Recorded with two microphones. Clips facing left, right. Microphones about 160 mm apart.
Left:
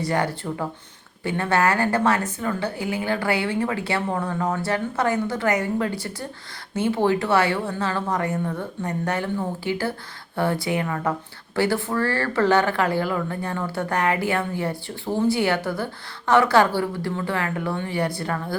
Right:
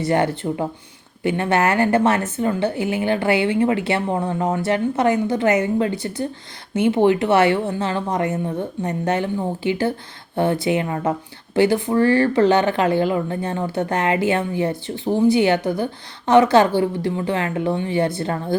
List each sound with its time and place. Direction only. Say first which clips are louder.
0.0 s speech: right 5 dB; 25° right (ahead or behind)